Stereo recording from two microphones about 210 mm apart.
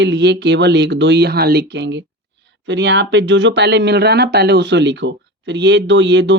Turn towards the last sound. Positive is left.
turn(degrees=-55)  # may be behind; listen again after turning